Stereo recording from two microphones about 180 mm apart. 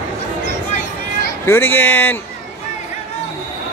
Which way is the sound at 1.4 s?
10° left (ahead or behind).